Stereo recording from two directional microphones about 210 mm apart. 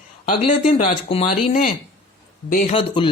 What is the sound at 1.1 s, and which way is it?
Speech, 30° left (ahead or behind).